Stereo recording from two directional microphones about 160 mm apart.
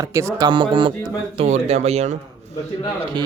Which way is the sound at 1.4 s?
45° right (ahead or behind).